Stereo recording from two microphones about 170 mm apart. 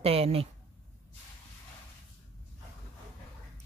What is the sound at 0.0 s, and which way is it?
Speech, 35° right (ahead or behind).